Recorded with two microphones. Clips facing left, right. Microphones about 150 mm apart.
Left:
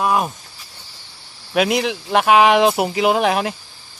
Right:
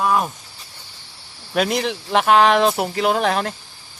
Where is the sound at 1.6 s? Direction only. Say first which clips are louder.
Left 2 dB; 5° left (ahead or behind).